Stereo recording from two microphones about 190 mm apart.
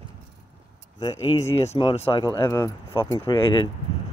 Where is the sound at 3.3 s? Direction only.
25° left (ahead or behind).